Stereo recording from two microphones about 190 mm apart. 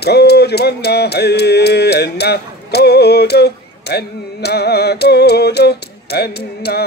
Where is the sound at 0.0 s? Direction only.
60° left (ahead or behind).